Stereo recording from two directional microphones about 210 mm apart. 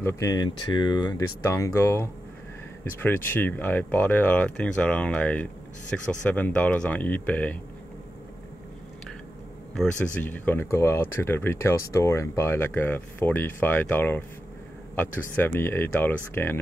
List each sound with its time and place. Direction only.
0.0 s speech: 15° left (ahead or behind)
9.8 s speech: 5° left (ahead or behind)